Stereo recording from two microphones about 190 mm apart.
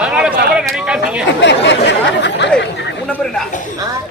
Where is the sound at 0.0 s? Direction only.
5° right (ahead or behind).